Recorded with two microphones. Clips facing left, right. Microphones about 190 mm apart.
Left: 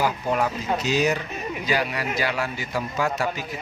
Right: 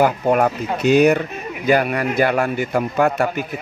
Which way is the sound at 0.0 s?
55° right (ahead or behind).